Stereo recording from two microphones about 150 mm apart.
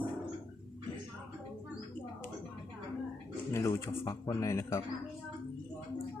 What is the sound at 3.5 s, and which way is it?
Speech, 15° left (ahead or behind).